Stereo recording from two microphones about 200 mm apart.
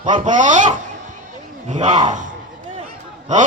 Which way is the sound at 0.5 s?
40° right (ahead or behind).